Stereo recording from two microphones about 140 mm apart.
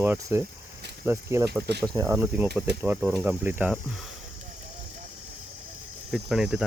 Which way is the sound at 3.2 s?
15° right (ahead or behind).